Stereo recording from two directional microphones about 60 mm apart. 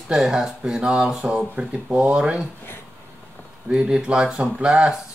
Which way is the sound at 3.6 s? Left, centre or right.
Centre.